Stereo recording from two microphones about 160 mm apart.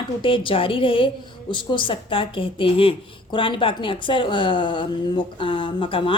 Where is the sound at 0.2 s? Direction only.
30° left (ahead or behind).